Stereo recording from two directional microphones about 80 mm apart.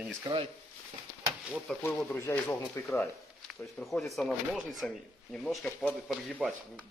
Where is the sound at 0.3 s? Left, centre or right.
Right.